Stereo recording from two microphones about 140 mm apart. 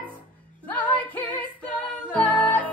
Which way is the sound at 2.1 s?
10° left (ahead or behind).